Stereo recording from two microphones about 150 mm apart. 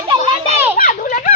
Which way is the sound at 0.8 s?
70° left (ahead or behind).